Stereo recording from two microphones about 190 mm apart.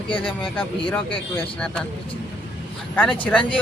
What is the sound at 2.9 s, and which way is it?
Speech, 10° left (ahead or behind).